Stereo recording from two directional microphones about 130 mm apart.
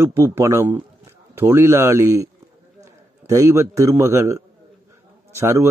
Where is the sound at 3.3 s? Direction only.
25° right (ahead or behind).